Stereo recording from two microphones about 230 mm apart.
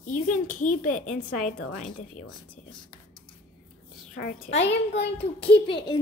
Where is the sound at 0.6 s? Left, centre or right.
Left.